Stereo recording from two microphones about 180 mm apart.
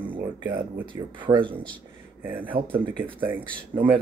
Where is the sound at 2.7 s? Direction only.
30° right (ahead or behind).